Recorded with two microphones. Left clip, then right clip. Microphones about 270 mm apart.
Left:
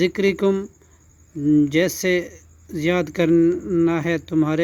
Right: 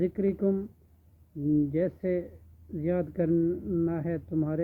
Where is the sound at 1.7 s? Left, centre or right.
Left.